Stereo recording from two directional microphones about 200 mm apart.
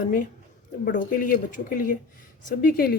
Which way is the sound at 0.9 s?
40° left (ahead or behind).